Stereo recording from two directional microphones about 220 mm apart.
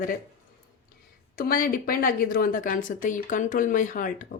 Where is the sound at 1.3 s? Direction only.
40° left (ahead or behind).